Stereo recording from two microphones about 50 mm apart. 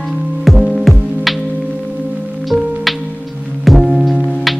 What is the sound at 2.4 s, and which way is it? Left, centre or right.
Music, centre.